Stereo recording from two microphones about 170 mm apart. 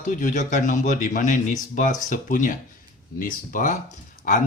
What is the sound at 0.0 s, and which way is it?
Speech, 50° left (ahead or behind).